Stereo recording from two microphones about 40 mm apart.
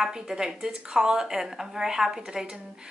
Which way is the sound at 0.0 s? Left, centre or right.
Centre.